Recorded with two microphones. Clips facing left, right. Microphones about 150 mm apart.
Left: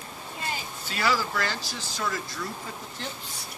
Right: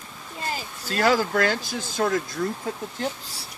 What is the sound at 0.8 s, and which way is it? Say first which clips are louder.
Speech: right 6 dB; 45° right (ahead or behind).